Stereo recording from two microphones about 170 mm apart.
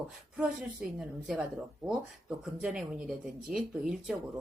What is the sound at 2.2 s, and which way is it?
A woman's voice, 5° right (ahead or behind).